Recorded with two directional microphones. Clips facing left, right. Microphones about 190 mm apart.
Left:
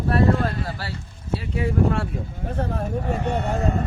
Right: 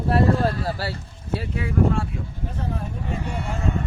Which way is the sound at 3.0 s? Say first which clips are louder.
Left 5 dB; 45° left (ahead or behind).